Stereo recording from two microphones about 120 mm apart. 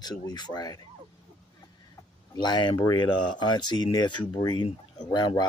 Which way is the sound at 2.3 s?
40° left (ahead or behind).